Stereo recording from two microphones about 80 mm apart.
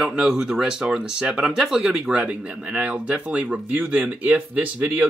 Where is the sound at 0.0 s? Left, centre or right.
Centre.